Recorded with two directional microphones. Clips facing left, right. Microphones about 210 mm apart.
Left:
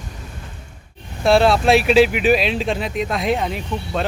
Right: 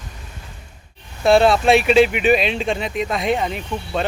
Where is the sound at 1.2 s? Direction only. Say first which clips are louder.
Right 1 dB; centre (ahead or behind).